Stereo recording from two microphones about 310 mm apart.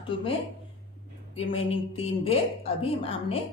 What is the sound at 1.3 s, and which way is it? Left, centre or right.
A woman's voice, centre.